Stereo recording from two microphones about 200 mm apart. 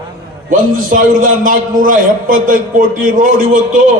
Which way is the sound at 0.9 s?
40° right (ahead or behind).